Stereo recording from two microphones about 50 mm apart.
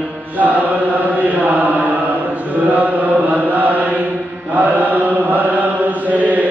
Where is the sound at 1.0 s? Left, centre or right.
Right.